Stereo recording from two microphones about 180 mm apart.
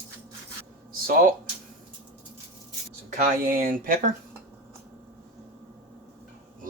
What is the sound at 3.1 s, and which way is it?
Speech, 50° right (ahead or behind).